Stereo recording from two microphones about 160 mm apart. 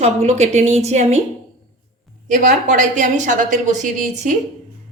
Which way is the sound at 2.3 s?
55° right (ahead or behind).